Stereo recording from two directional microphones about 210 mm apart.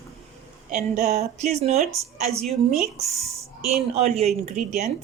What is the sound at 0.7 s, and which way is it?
Speech, 35° right (ahead or behind).